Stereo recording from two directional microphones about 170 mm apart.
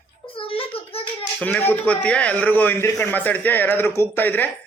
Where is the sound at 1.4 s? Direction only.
5° left (ahead or behind).